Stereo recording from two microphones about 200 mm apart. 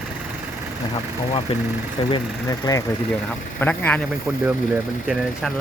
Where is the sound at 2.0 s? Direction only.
25° left (ahead or behind).